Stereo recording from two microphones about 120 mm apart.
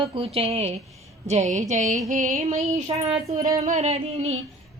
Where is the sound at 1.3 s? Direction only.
85° right.